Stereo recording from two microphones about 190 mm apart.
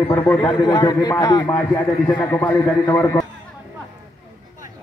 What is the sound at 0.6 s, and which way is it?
Speech, 20° left (ahead or behind).